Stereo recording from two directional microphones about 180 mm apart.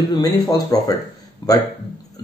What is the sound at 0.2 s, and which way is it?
Speech, 20° left (ahead or behind).